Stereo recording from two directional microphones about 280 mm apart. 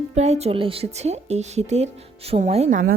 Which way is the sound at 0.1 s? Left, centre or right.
Right.